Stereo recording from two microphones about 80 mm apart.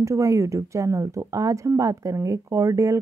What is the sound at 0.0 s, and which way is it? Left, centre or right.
Speech, right.